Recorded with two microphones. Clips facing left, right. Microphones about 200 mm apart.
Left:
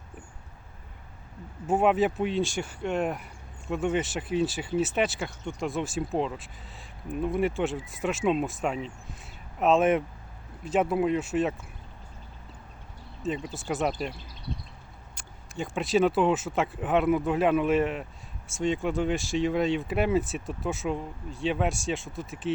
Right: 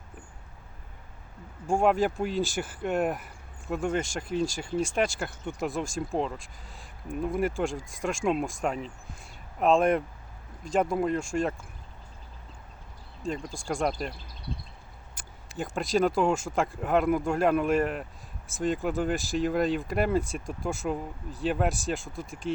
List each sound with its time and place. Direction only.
1.6 s speech: 5° left (ahead or behind)
13.2 s speech: 5° left (ahead or behind)
15.1 s speech: 5° right (ahead or behind)